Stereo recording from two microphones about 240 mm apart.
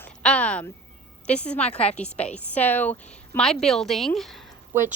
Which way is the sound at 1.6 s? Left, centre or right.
Left.